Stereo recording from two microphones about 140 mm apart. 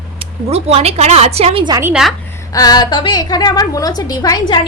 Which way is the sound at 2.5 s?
30° left (ahead or behind).